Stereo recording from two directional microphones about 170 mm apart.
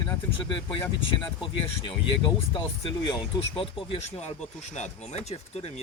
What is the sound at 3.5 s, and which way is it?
Speech, 30° left (ahead or behind).